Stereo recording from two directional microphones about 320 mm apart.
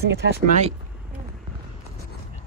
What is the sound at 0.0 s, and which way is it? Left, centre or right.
Speech, right.